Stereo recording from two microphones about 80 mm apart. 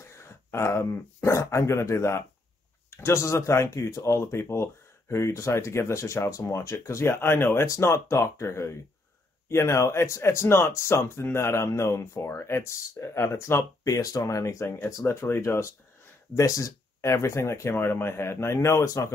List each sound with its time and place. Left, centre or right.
0.0 s speech: left
16.3 s speech: left